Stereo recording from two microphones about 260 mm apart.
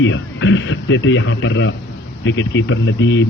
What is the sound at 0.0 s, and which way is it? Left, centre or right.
Speech, left.